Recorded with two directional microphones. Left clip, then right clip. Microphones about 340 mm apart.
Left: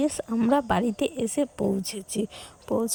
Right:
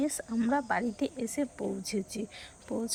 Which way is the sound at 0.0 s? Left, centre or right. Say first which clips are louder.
Left 6 dB; left.